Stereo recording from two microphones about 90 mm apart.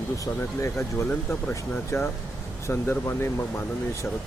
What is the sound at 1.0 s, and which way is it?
Speech, 20° left (ahead or behind).